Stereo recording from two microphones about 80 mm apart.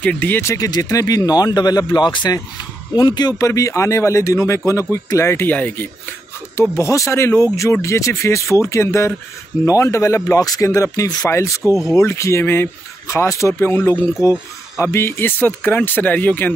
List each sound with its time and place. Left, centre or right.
0.0 s speech: left
0.4 s speech: left
0.7 s speech: left
3.4 s speech: left
5.5 s speech: centre
6.5 s speech: left
13.6 s speech: left